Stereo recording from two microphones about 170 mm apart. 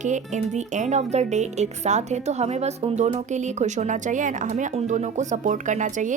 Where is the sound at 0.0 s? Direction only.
45° right (ahead or behind).